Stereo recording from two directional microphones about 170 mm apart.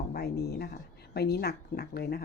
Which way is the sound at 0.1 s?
65° left (ahead or behind).